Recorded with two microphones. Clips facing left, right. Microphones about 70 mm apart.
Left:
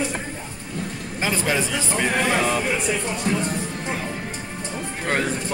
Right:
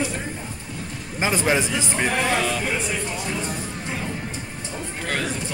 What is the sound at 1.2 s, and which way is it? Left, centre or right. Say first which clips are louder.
Speech: right 2 dB; centre.